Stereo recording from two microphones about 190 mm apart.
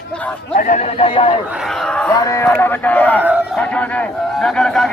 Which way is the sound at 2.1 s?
20° left (ahead or behind).